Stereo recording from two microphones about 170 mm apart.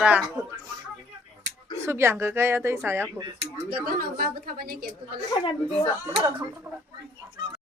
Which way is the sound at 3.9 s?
55° right (ahead or behind).